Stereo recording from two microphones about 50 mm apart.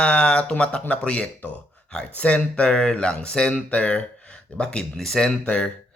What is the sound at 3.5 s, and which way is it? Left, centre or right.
Speech, left.